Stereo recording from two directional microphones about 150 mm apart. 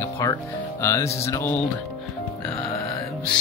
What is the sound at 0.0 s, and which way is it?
Speech, 20° left (ahead or behind).